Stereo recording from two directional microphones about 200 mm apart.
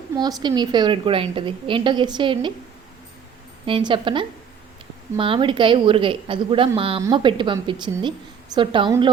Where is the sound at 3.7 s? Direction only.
25° right (ahead or behind).